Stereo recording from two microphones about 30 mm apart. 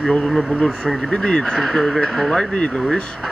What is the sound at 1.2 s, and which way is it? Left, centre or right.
Speech, left.